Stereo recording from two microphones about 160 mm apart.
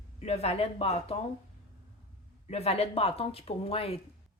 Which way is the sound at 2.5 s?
40° left (ahead or behind).